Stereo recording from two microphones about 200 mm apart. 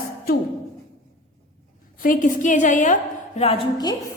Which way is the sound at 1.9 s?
45° left (ahead or behind).